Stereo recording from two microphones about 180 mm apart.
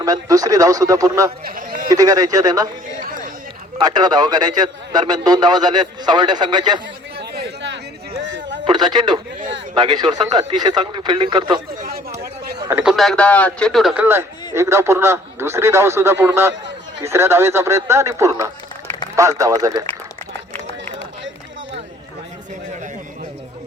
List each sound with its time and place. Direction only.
0.0 s a man's voice: 20° right (ahead or behind)
1.5 s a sound: 50° right (ahead or behind)
1.9 s a man's voice: 20° right (ahead or behind)
3.8 s a man's voice: 20° right (ahead or behind)
7.2 s chatter: 70° right (ahead or behind)
8.2 s a sound: 90° right
8.6 s a man's voice: 25° right (ahead or behind)
12.6 s a man's voice: 5° right (ahead or behind)